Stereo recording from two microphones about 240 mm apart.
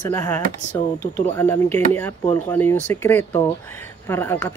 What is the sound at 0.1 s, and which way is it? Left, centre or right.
Speech, centre.